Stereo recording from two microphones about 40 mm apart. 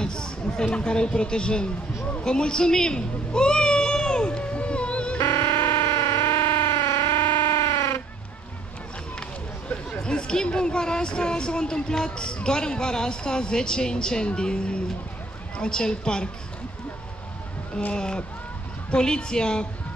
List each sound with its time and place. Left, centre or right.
0.0 s chatter: centre
0.7 s speech: left
2.2 s meow: left
5.2 s music: left
10.0 s speech: left
17.9 s speech: left